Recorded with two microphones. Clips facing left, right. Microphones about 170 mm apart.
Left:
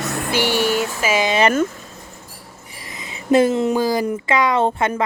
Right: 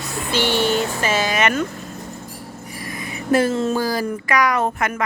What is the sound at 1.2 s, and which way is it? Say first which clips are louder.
Speech: left 6 dB; 30° left (ahead or behind).